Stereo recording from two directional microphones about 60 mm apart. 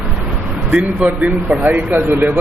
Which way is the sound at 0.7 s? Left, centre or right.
Right.